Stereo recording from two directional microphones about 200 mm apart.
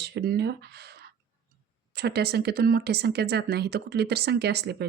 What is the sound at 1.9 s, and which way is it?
Speech, 55° right (ahead or behind).